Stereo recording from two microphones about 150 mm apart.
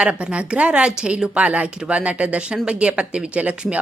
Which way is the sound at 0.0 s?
5° right (ahead or behind).